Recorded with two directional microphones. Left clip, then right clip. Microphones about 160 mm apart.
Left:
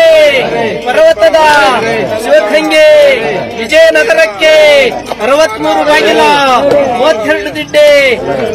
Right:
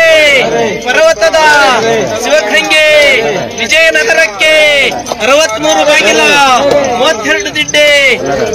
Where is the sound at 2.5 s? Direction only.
30° left (ahead or behind).